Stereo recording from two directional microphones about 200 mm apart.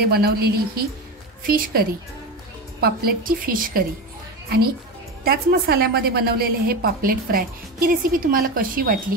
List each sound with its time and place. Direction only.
0.0 s a woman's voice: 50° right (ahead or behind)
5.2 s a woman's voice: 50° right (ahead or behind)